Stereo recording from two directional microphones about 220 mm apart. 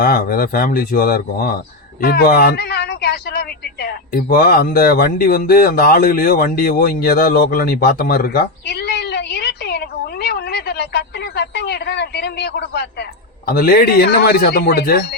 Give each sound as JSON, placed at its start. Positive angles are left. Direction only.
{"t": 0.0, "sound": "speech", "side_deg": 45}